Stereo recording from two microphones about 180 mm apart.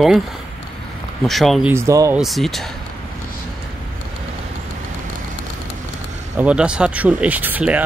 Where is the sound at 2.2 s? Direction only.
Centre (ahead or behind).